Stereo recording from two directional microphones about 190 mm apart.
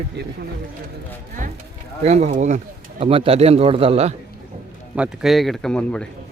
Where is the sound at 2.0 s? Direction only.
35° right (ahead or behind).